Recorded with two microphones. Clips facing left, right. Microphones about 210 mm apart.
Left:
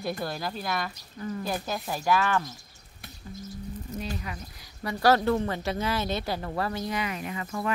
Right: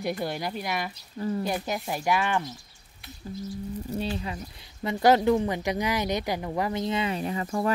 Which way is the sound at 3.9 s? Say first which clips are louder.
Right 4 dB; 30° right (ahead or behind).